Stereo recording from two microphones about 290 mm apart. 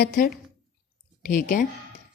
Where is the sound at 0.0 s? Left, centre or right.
Left.